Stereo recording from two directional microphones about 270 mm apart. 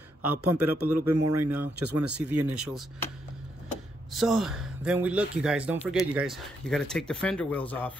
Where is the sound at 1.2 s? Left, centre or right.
Right.